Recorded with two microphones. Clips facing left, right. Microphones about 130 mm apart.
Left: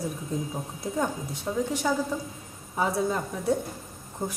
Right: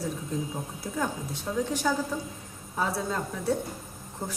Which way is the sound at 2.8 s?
15° left (ahead or behind).